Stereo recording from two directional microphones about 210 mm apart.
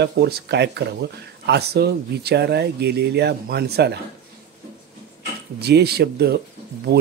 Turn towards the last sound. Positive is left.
turn(degrees=-50)  # may be behind; listen again after turning